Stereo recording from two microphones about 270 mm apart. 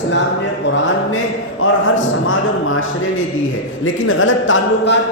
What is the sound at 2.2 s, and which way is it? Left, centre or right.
Speech, left.